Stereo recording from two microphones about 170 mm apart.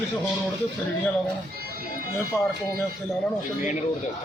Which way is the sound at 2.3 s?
10° left (ahead or behind).